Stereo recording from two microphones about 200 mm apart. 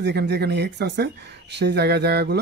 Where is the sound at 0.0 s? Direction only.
55° right (ahead or behind).